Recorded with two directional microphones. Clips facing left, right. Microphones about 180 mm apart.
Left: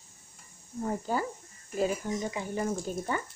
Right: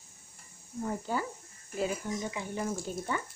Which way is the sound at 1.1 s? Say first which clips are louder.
Left 3 dB; 40° left (ahead or behind).